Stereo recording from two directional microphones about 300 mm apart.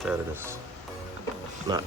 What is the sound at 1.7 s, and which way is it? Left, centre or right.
Speech, centre.